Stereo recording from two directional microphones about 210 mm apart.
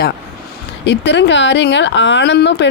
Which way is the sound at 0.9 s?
55° left (ahead or behind).